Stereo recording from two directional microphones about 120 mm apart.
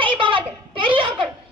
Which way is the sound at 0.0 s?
45° right (ahead or behind).